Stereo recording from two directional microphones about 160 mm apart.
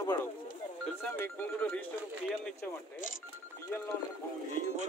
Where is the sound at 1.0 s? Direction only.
10° left (ahead or behind).